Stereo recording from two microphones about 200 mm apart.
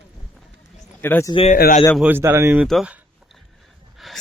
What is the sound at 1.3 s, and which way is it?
Speech, 30° left (ahead or behind).